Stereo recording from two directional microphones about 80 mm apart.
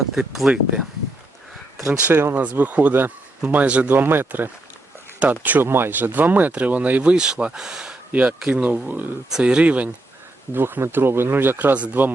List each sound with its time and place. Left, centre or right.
0.2 s speech: centre
1.9 s speech: right